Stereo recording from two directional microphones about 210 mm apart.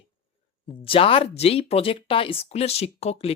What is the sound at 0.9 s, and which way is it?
Speech, 25° left (ahead or behind).